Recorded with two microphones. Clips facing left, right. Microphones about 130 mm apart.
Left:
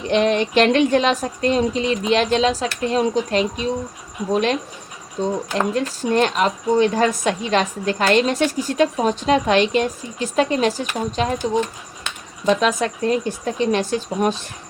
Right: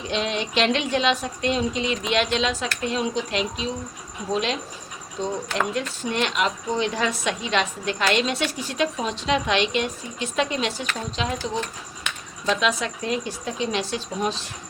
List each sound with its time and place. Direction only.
0.1 s a woman's voice: 50° left (ahead or behind)
12.5 s speech: 45° left (ahead or behind)